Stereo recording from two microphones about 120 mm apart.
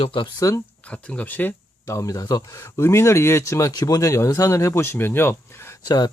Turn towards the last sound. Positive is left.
turn(degrees=35)  # may be behind; listen again after turning